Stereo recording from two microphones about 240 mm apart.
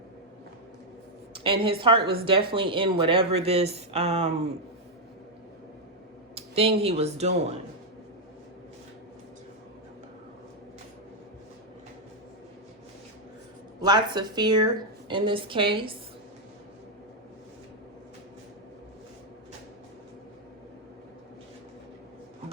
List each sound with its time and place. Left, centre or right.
1.3 s a woman's voice: right
6.3 s speech: right
13.8 s a woman's voice: centre